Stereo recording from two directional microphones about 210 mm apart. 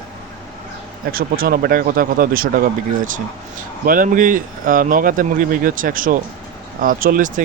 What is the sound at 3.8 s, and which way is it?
Speech, 40° right (ahead or behind).